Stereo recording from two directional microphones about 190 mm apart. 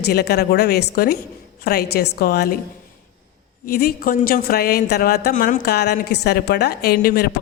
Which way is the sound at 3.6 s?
50° left (ahead or behind).